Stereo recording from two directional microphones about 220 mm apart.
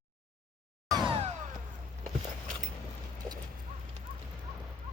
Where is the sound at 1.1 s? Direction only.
30° right (ahead or behind).